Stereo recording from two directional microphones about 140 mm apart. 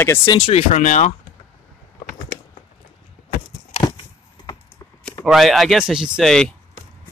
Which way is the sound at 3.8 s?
35° left (ahead or behind).